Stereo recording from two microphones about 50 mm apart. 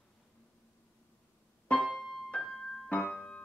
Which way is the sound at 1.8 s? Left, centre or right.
Centre.